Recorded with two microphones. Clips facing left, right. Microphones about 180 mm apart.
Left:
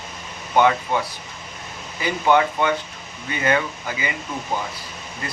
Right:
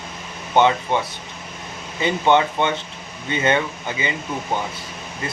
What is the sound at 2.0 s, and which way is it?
Speech, 25° right (ahead or behind).